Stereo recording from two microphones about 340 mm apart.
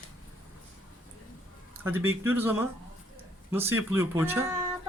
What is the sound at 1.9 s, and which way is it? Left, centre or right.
Speech, centre.